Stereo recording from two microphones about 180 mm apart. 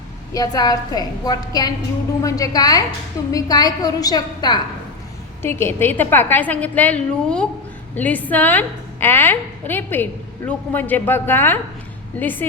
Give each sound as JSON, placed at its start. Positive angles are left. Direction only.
{"t": 0.3, "sound": "a woman's voice", "side_deg": 20}
{"t": 5.4, "sound": "a woman's voice", "side_deg": 15}